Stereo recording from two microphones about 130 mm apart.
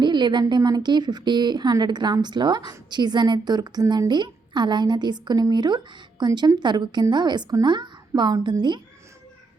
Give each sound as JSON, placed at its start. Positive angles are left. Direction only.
{"t": 0.0, "sound": "a woman's voice", "side_deg": -35}